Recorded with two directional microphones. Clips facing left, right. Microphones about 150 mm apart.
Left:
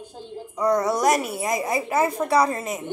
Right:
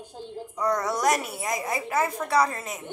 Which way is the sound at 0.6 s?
25° left (ahead or behind).